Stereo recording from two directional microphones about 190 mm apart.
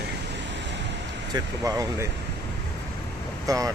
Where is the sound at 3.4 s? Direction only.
15° right (ahead or behind).